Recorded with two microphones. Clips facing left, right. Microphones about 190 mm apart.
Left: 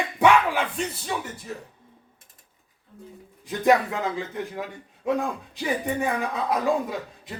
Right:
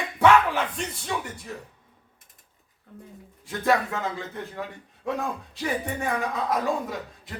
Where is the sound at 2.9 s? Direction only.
65° right (ahead or behind).